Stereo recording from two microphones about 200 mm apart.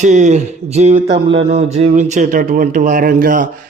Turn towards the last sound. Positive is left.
turn(degrees=-45)  # may be behind; listen again after turning